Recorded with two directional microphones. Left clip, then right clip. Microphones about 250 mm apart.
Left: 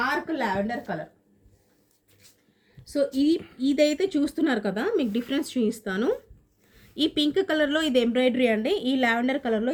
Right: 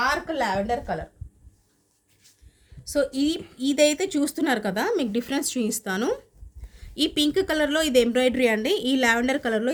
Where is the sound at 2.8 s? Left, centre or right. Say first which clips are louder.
Even; right.